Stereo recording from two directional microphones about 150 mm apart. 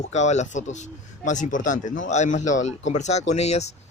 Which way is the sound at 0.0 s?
50° left (ahead or behind).